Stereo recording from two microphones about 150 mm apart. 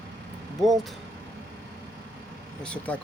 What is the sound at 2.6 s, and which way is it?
Speech, 5° left (ahead or behind).